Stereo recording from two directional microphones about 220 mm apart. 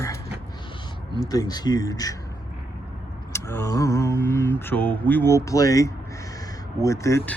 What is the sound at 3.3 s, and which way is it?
Speech, 10° left (ahead or behind).